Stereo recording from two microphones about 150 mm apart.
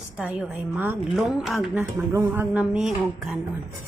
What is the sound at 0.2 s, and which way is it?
Speech, 10° right (ahead or behind).